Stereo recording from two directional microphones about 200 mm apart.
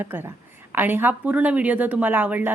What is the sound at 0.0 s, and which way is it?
Speech, 10° right (ahead or behind).